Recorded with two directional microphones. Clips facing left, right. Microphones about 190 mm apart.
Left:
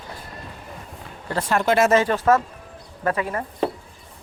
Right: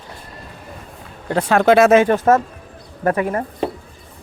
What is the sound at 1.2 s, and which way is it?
Speech, 60° right (ahead or behind).